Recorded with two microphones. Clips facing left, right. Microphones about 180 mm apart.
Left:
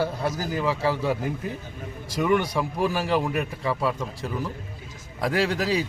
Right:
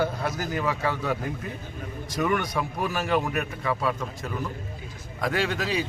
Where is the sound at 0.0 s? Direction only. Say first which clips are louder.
Left 1 dB; 30° left (ahead or behind).